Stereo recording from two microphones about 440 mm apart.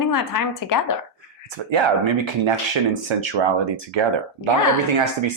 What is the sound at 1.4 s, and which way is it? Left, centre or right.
Speech, right.